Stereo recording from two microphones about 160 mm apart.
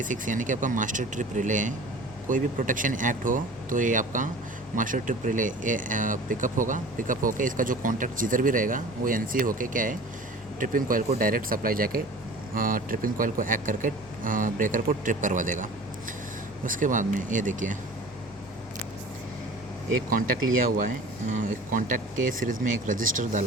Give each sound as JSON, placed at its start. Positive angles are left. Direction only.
{"t": 0.0, "sound": "speech", "side_deg": -55}
{"t": 21.7, "sound": "speech", "side_deg": -55}